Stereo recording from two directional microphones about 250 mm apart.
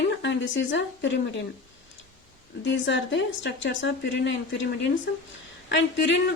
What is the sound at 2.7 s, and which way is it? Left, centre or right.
Speech, left.